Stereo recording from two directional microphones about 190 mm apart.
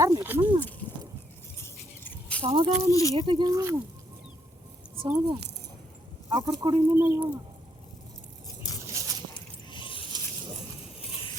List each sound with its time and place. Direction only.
0.0 s speech: 15° right (ahead or behind)
2.4 s speech: 35° right (ahead or behind)
2.9 s speech: 15° left (ahead or behind)
3.2 s speech: 25° right (ahead or behind)
5.0 s speech: 20° right (ahead or behind)
8.9 s dog: 20° right (ahead or behind)
9.6 s a sound: 25° left (ahead or behind)